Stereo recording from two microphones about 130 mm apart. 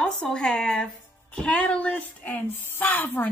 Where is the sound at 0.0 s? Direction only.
5° left (ahead or behind).